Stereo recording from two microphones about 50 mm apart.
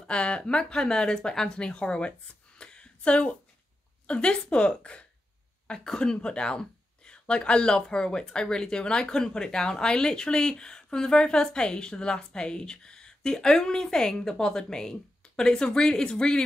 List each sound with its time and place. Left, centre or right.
0.0 s speech: centre
2.6 s a sound: centre
4.1 s speech: left